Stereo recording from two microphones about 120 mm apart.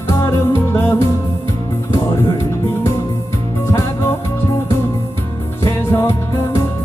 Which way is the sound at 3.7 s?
20° left (ahead or behind).